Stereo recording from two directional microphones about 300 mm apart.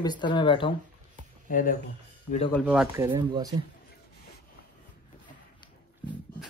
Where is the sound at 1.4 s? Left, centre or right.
Left.